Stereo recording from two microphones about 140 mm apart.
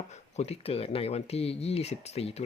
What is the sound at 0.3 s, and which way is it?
Speech, 45° left (ahead or behind).